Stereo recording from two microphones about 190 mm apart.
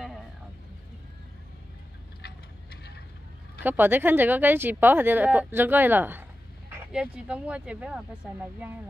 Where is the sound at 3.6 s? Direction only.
10° right (ahead or behind).